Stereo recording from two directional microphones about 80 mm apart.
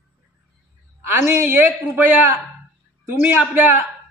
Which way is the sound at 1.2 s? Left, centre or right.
Right.